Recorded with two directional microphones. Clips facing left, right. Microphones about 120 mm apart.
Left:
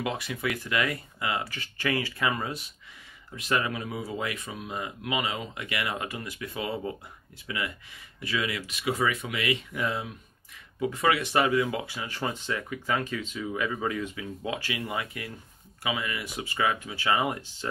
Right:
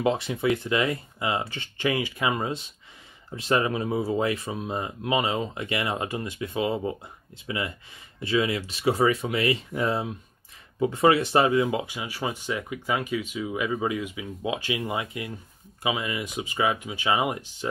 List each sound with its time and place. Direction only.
0.0 s speech: 25° right (ahead or behind)